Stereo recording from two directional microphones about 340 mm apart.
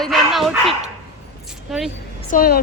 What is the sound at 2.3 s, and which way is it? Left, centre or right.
Speech, left.